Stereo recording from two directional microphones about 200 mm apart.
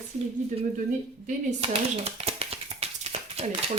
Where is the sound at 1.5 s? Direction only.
30° right (ahead or behind).